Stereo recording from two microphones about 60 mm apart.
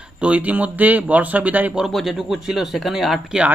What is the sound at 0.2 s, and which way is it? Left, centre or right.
A man's voice, right.